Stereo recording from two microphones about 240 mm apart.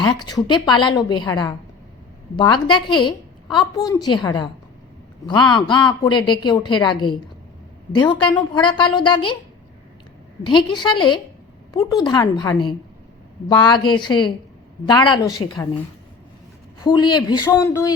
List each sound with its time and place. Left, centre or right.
0.2 s a woman's voice: centre
10.4 s a woman's voice: centre
13.8 s a woman's voice: centre
16.8 s a woman's voice: centre